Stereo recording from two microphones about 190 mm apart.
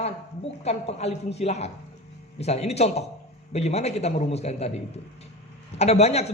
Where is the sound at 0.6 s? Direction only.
35° left (ahead or behind).